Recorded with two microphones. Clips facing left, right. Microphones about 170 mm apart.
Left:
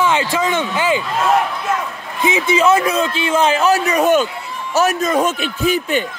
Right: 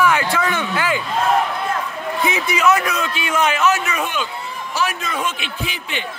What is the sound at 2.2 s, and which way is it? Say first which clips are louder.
A man's voice: left 4 dB; 25° left (ahead or behind).